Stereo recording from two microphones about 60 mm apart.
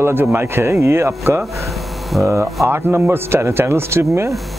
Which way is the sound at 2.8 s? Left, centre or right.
Right.